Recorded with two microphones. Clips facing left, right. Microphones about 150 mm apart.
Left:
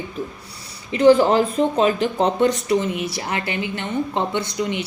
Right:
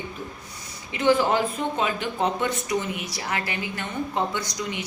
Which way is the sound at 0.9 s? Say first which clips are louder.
Left 7 dB; 35° left (ahead or behind).